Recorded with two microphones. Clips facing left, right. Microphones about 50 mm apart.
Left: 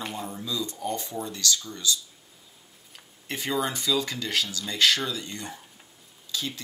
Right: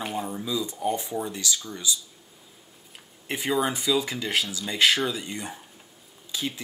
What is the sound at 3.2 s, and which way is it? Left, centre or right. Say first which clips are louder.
Speech: right 3 dB; centre.